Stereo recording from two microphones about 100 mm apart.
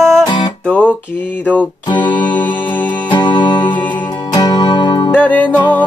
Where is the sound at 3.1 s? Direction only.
50° left (ahead or behind).